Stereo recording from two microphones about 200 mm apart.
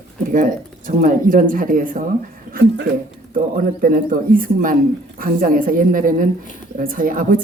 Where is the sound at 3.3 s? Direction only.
45° right (ahead or behind).